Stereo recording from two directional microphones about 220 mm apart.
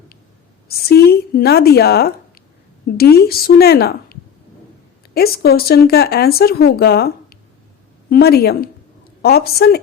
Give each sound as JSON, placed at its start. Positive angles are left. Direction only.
{"t": 0.7, "sound": "speech", "side_deg": 45}